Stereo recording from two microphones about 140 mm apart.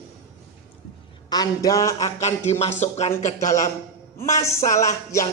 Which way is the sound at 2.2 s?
50° left (ahead or behind).